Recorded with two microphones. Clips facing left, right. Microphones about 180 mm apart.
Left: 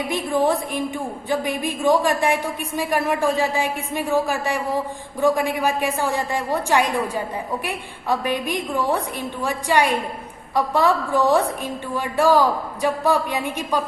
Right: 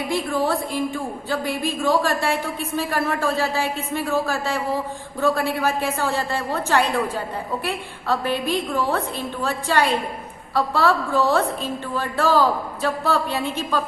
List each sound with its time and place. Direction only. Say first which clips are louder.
0.1 s a woman's voice: left 2 dB; 20° left (ahead or behind)